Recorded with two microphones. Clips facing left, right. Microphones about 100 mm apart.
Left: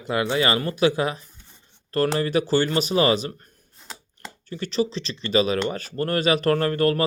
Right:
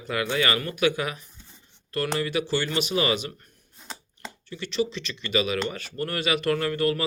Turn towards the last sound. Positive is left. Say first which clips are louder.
# left 4 dB
turn(degrees=45)  # may be behind; listen again after turning